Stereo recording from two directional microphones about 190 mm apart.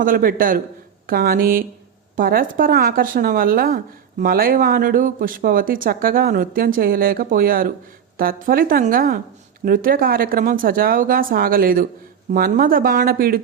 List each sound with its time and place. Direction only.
0.0 s speech: 50° right (ahead or behind)